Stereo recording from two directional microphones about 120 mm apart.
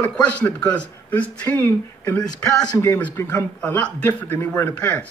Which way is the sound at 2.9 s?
15° left (ahead or behind).